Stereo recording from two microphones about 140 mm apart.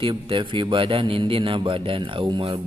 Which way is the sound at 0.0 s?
35° right (ahead or behind).